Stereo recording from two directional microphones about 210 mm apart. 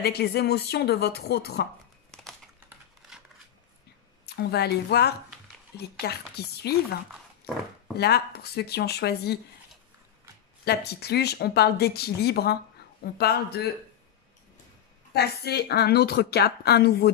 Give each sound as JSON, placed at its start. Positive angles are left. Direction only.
{"t": 0.0, "sound": "speech", "side_deg": 50}
{"t": 4.4, "sound": "speech", "side_deg": 50}
{"t": 8.0, "sound": "speech", "side_deg": 50}
{"t": 10.6, "sound": "speech", "side_deg": 50}
{"t": 15.1, "sound": "speech", "side_deg": 50}